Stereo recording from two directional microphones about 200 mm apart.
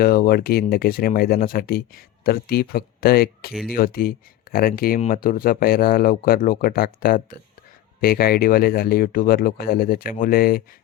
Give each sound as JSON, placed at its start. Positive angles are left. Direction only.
{"t": 0.0, "sound": "speech", "side_deg": 50}